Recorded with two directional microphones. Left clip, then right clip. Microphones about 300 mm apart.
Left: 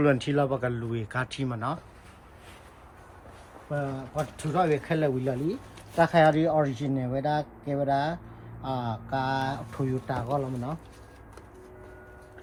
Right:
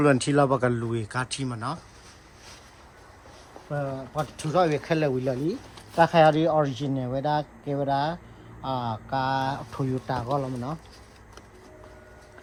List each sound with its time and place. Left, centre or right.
0.0 s speech: centre
3.7 s speech: centre